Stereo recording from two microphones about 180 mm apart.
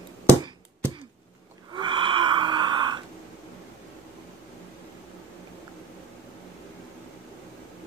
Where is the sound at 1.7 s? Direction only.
25° right (ahead or behind).